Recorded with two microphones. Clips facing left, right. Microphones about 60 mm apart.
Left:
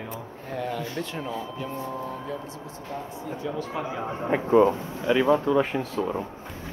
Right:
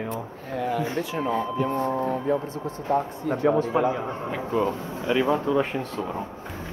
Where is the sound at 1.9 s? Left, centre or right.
Right.